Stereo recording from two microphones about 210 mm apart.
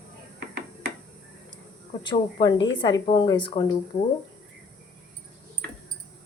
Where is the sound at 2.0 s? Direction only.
20° left (ahead or behind).